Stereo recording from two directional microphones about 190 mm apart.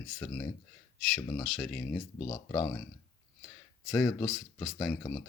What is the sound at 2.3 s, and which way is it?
Speech, 20° left (ahead or behind).